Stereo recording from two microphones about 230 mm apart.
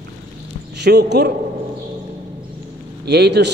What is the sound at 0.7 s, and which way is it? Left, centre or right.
Speech, right.